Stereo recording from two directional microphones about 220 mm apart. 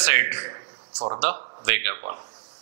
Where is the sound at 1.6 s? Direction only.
15° right (ahead or behind).